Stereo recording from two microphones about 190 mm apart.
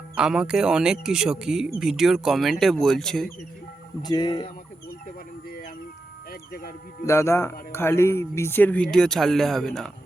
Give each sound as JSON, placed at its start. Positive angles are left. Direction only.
{"t": 0.2, "sound": "speech", "side_deg": -5}
{"t": 4.0, "sound": "speech", "side_deg": 20}
{"t": 5.5, "sound": "a sound", "side_deg": 50}
{"t": 6.5, "sound": "speech", "side_deg": 50}
{"t": 7.0, "sound": "speech", "side_deg": 15}